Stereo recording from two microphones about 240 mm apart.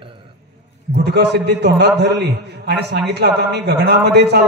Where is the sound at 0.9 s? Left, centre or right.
Right.